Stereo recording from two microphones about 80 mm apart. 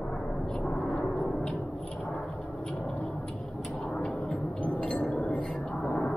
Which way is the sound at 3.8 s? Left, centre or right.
Centre.